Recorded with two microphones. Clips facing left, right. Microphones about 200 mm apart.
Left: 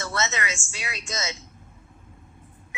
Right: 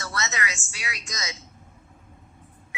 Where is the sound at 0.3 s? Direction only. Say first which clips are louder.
Left 1 dB; 25° left (ahead or behind).